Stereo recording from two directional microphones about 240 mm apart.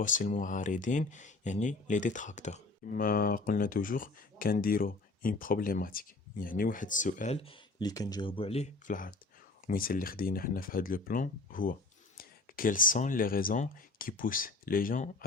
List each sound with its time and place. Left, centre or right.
0.0 s speech: left